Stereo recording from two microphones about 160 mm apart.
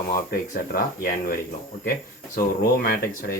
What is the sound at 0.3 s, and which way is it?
Speech, 55° left (ahead or behind).